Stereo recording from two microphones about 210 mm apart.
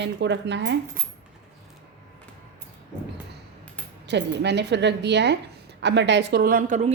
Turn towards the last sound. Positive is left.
turn(degrees=-35)  # may be behind; listen again after turning